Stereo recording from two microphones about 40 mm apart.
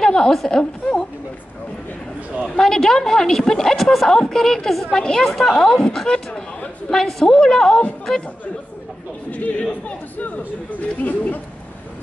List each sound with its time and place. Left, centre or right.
0.0 s a sound: centre
0.5 s a woman's voice: centre
2.6 s a woman's voice: centre
4.9 s speech: left
5.2 s a woman's voice: centre
9.3 s speech: left